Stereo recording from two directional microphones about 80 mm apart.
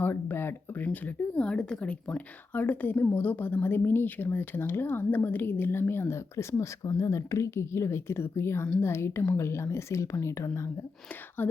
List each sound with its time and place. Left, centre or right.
0.0 s a sound: left
1.0 s speech: centre; by 10.7 s left
11.4 s speech: left